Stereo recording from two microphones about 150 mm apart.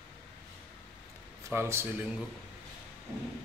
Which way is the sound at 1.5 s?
15° right (ahead or behind).